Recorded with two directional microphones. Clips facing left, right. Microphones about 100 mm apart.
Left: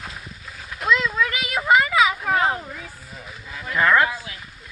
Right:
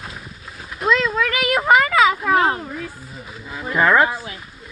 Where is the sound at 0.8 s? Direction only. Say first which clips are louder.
Right 3 dB; 35° right (ahead or behind).